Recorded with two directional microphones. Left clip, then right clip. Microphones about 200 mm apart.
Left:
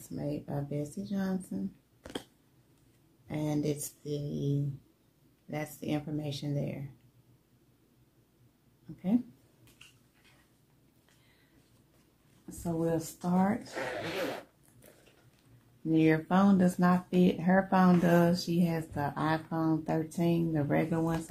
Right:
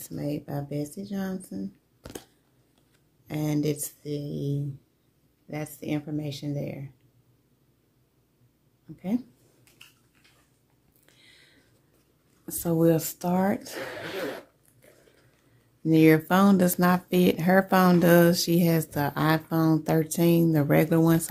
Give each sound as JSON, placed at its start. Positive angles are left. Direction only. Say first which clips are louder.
{"t": 0.1, "sound": "speech", "louder": "right 4 dB", "side_deg": -35}
{"t": 2.0, "sound": "scissors", "louder": "even", "side_deg": -15}
{"t": 3.3, "sound": "speech", "louder": "right 5 dB", "side_deg": -35}
{"t": 12.8, "sound": "speech", "louder": "right 9 dB", "side_deg": -60}
{"t": 15.9, "sound": "speech", "louder": "right 7 dB", "side_deg": -55}